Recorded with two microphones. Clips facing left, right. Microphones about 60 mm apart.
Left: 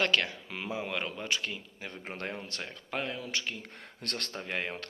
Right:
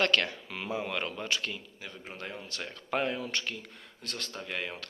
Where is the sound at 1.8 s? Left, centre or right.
Left.